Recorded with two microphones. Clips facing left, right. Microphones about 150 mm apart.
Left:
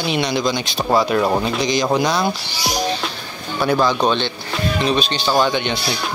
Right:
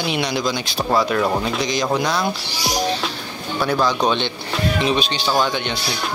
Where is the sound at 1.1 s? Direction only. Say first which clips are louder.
Left 2 dB; 15° left (ahead or behind).